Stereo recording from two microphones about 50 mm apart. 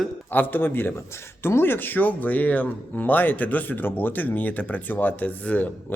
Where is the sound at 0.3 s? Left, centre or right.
Left.